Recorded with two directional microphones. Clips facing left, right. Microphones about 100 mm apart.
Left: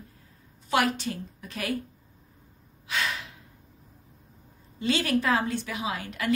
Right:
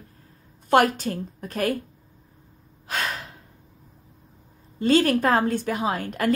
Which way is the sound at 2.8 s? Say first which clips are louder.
Right 2 dB; 45° right (ahead or behind).